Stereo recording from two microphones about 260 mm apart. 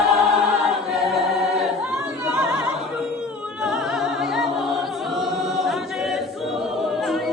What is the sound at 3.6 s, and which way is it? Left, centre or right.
Music, centre.